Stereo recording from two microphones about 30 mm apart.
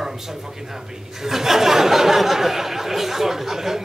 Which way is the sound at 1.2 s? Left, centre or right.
Centre.